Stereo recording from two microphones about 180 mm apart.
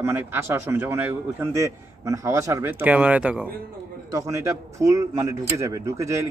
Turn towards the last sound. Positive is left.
turn(degrees=-15)  # may be behind; listen again after turning